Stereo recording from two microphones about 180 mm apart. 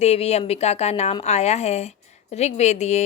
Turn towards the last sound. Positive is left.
turn(degrees=40)  # may be behind; listen again after turning